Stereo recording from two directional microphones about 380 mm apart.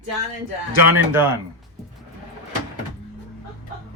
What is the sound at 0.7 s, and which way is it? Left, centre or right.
Speech, centre.